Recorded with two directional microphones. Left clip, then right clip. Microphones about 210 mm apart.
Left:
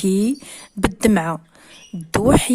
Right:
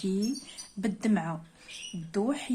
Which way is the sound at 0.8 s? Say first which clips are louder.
Left 13 dB; 50° left (ahead or behind).